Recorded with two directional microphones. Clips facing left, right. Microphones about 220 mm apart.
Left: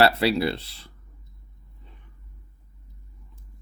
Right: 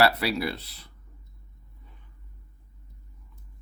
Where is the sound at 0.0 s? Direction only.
25° left (ahead or behind).